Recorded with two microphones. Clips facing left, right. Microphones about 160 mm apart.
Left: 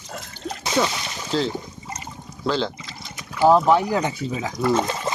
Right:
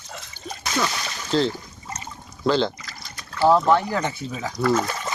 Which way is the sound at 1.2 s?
5° left (ahead or behind).